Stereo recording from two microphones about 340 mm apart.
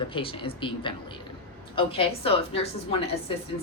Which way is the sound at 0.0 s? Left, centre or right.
Centre.